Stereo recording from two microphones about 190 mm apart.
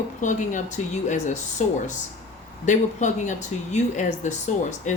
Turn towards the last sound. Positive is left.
turn(degrees=40)  # may be behind; listen again after turning